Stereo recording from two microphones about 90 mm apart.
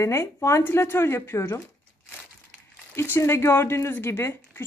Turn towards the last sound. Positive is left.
turn(degrees=25)  # may be behind; listen again after turning